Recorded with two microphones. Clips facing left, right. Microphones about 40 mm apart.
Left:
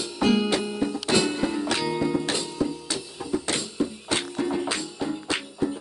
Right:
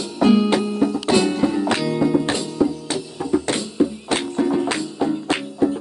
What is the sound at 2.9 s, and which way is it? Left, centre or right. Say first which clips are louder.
Music: right 7 dB; centre.